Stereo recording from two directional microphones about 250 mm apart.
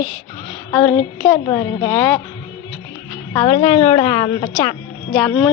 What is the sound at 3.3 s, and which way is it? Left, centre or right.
A woman's voice, centre.